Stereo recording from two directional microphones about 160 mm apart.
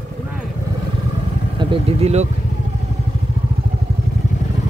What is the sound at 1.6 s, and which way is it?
Speech, 35° right (ahead or behind).